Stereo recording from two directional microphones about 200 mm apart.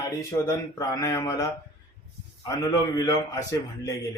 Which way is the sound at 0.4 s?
15° left (ahead or behind).